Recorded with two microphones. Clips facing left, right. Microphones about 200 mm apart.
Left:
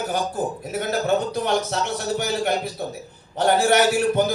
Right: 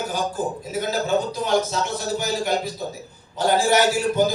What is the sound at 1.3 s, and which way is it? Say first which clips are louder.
A man's voice: right 1 dB; 60° left (ahead or behind).